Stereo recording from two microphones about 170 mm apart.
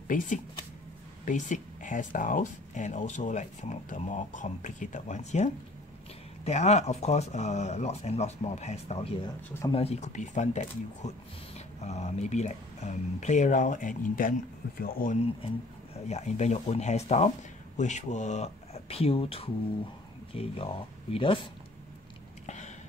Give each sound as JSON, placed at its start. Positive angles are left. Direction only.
{"t": 0.1, "sound": "speech", "side_deg": 50}
{"t": 15.4, "sound": "speech", "side_deg": 40}